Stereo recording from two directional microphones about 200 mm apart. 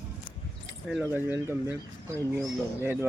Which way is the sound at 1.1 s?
10° right (ahead or behind).